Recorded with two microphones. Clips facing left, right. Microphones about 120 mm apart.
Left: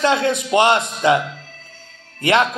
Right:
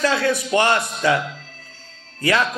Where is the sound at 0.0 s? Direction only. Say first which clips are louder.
Left 2 dB; 20° left (ahead or behind).